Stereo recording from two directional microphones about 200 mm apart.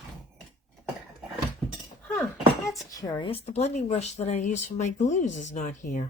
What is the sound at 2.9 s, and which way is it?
Speech, 20° left (ahead or behind).